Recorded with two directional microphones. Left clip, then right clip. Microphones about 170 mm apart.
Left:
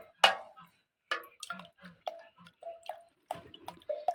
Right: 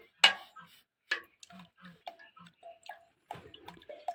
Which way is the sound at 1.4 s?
20° left (ahead or behind).